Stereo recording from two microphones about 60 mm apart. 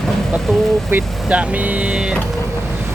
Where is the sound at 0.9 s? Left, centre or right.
Right.